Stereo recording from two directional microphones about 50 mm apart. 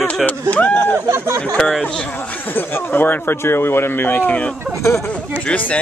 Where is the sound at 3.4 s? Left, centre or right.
Left.